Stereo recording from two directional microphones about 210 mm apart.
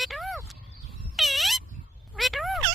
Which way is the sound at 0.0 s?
Centre (ahead or behind).